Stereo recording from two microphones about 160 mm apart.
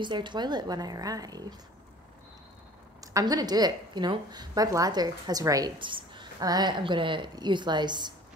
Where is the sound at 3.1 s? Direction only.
20° right (ahead or behind).